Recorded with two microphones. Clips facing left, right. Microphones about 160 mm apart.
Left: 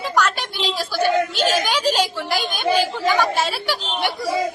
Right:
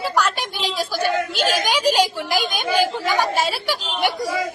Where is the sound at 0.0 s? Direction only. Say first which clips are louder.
Even; 10° right (ahead or behind).